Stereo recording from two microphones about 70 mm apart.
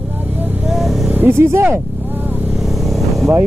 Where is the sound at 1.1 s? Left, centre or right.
Right.